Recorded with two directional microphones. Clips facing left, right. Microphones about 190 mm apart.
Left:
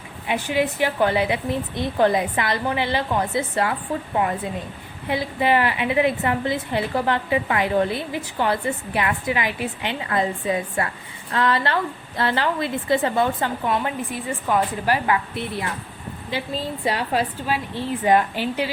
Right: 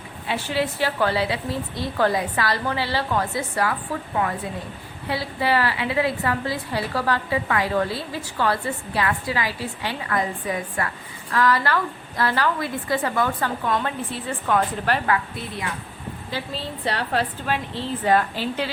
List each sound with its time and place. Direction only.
0.3 s a woman's voice: 15° left (ahead or behind)
5.0 s a woman's voice: 20° left (ahead or behind)
16.8 s a woman's voice: 10° left (ahead or behind)